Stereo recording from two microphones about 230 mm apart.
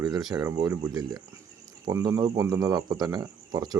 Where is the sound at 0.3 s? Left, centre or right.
Centre.